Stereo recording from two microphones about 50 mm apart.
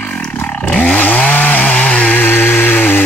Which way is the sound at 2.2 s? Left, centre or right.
Left.